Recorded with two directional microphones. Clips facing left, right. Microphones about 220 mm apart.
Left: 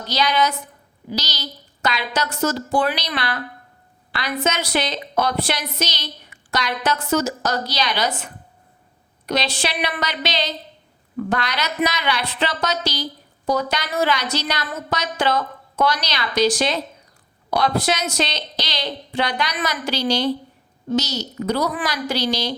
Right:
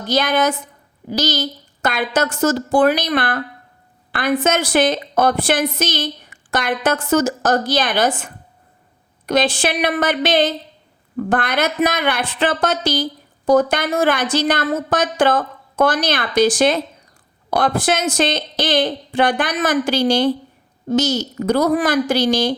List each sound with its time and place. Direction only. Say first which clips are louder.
0.0 s a woman's voice: right 4 dB; 50° right (ahead or behind)